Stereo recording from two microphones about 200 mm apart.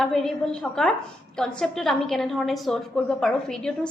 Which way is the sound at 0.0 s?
Centre (ahead or behind).